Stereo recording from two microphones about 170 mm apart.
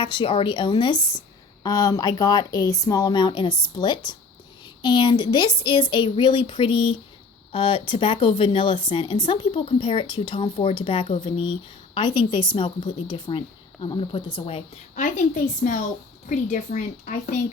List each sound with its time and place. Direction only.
0.0 s a woman's voice: 30° left (ahead or behind)
14.9 s speech: 45° left (ahead or behind)